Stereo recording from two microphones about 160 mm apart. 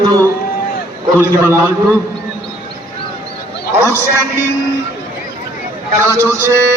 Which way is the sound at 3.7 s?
15° right (ahead or behind).